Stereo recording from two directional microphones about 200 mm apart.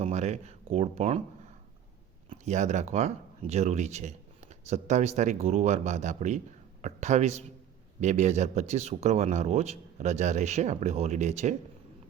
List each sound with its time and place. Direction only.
0.0 s speech: 35° right (ahead or behind)
2.3 s speech: 35° right (ahead or behind)